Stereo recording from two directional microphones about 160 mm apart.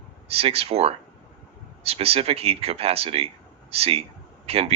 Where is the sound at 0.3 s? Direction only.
35° right (ahead or behind).